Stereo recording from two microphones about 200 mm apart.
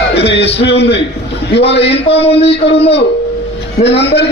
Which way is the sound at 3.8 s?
55° left (ahead or behind).